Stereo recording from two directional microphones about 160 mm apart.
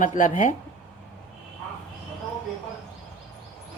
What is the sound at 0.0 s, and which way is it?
Speech, 50° left (ahead or behind).